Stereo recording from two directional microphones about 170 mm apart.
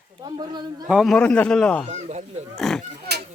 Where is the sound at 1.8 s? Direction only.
40° right (ahead or behind).